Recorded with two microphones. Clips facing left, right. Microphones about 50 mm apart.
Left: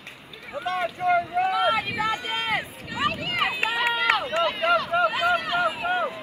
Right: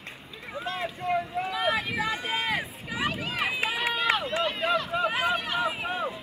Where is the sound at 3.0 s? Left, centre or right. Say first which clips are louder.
Left 4 dB; left.